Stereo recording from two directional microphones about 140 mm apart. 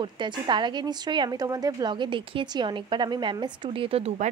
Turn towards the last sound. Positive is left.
turn(degrees=-45)  # may be behind; listen again after turning